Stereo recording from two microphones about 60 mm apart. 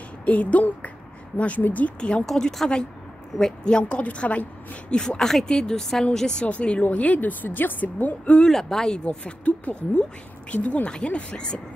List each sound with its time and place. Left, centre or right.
0.2 s a sound: left
1.4 s speech: left
2.2 s a woman's voice: centre
5.0 s a woman's voice: centre; by 8.4 s left
8.4 s a woman's voice: centre